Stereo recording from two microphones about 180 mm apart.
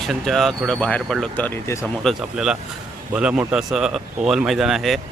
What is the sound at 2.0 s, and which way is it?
Speech, 5° right (ahead or behind).